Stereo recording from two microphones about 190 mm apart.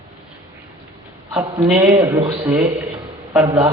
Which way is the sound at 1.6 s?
10° right (ahead or behind).